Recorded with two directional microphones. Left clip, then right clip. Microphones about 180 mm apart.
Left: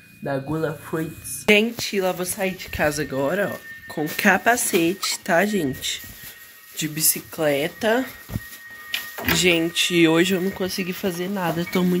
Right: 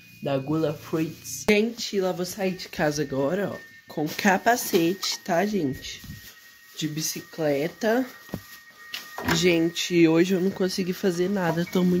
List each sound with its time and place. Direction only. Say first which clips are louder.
0.2 s speech: even; 10° right (ahead or behind)
2.4 s speech: left 3 dB; 30° right (ahead or behind)
2.8 s speech: left 3 dB; 15° right (ahead or behind)
5.2 s speech: left 5 dB; centre (ahead or behind); by 8.1 s 20° right (ahead or behind)
9.3 s speech: left 3 dB; 10° right (ahead or behind)
10.5 s speech: left 1 dB; 30° right (ahead or behind)
11.7 s speech: left 2 dB; 15° right (ahead or behind)